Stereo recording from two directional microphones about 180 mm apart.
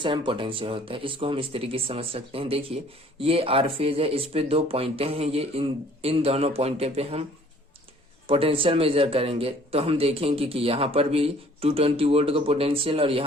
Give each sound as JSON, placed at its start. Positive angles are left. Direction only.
{"t": 0.0, "sound": "speech", "side_deg": -25}
{"t": 8.3, "sound": "speech", "side_deg": -30}